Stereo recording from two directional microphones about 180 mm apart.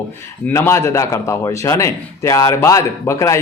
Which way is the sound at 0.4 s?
15° left (ahead or behind).